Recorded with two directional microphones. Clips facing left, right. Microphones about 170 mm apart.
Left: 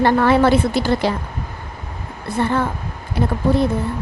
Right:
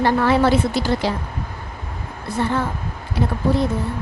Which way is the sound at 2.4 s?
60° left (ahead or behind).